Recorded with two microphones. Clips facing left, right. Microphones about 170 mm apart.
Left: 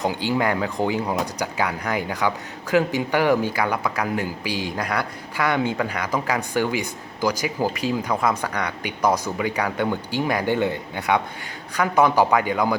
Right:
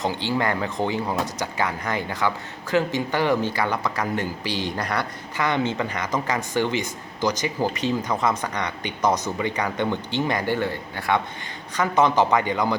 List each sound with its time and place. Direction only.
0.0 s speech: 15° left (ahead or behind)